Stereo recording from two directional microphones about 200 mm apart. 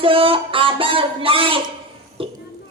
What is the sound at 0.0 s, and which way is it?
A man's voice, 25° right (ahead or behind).